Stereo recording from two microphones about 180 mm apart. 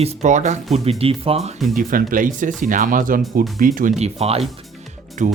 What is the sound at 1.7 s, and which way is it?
Speech, 50° right (ahead or behind).